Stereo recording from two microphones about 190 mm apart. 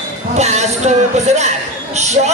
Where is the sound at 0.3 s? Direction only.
35° right (ahead or behind).